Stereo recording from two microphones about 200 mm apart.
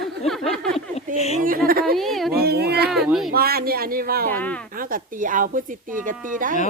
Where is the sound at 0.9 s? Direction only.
30° left (ahead or behind).